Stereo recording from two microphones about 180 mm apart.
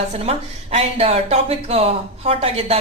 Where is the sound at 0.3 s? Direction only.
35° right (ahead or behind).